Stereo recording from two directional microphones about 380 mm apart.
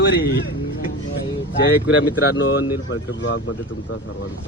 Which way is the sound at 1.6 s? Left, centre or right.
Left.